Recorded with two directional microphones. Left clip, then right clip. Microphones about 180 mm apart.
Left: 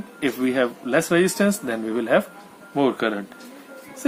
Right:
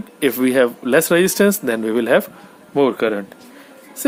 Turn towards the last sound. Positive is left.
turn(degrees=-45)  # may be behind; listen again after turning